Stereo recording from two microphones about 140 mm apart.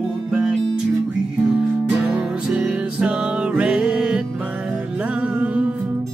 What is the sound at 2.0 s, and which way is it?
Music, 10° right (ahead or behind).